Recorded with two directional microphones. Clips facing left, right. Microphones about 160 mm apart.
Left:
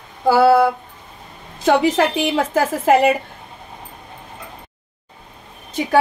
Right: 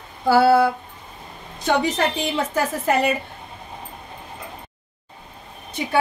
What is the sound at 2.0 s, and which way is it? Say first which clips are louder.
A woman's voice: left 5 dB; 90° left.